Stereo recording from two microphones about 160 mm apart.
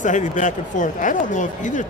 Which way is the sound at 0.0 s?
50° left (ahead or behind).